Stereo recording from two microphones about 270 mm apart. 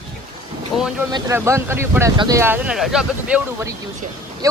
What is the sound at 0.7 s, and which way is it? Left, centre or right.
Speech, centre.